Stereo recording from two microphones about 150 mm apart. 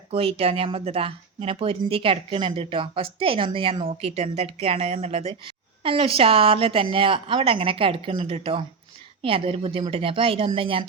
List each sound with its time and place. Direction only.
0.1 s speech: 40° right (ahead or behind)